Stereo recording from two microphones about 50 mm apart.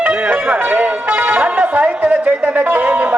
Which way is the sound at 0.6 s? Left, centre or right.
Right.